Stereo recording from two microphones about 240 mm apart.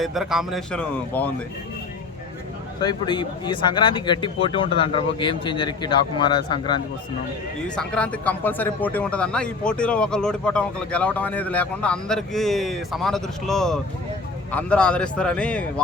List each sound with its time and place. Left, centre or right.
0.0 s speech: centre
2.8 s speech: centre
7.6 s speech: centre